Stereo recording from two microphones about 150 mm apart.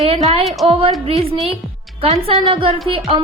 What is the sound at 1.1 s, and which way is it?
Speech, 40° right (ahead or behind).